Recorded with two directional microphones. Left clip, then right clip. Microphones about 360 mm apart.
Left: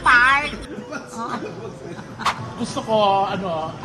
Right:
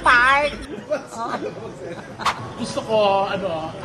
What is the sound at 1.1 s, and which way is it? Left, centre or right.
Speech, centre.